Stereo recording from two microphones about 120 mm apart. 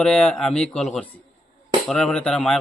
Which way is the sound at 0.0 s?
5° left (ahead or behind).